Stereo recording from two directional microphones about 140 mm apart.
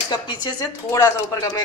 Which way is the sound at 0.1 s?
30° left (ahead or behind).